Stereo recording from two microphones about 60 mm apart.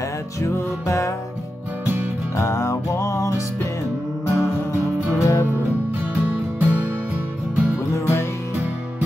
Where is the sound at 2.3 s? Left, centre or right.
Left.